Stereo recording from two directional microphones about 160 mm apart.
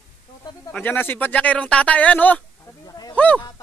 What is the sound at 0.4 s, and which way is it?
Speech, 20° left (ahead or behind).